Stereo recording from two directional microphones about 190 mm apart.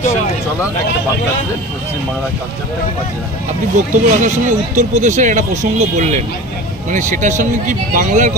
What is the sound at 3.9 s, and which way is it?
Speech, 40° right (ahead or behind).